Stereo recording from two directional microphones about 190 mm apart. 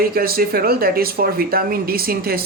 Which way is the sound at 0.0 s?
50° right (ahead or behind).